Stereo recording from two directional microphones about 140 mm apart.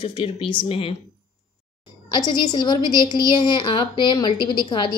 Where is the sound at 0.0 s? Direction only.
40° left (ahead or behind).